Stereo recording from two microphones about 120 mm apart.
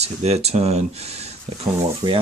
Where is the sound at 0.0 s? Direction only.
60° right (ahead or behind).